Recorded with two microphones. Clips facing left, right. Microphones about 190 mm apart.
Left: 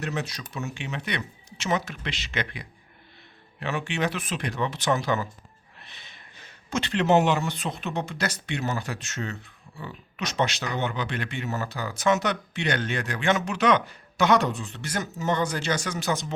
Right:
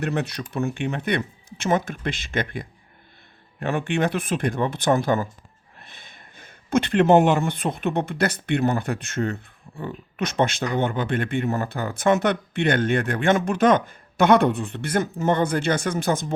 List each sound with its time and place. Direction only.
0.0 s speech: 55° right (ahead or behind)